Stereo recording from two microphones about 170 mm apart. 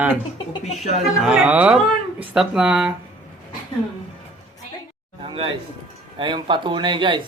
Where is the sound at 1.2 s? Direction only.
5° right (ahead or behind).